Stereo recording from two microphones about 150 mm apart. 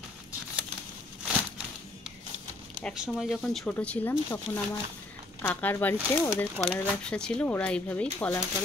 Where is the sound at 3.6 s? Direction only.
10° left (ahead or behind).